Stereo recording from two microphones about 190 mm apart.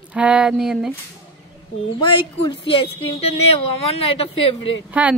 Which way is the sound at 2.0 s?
25° left (ahead or behind).